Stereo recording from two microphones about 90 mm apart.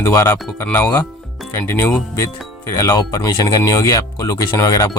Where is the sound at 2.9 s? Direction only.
50° left (ahead or behind).